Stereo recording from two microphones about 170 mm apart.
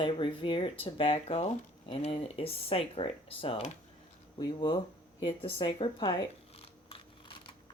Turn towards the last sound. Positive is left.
turn(degrees=30)  # may be behind; listen again after turning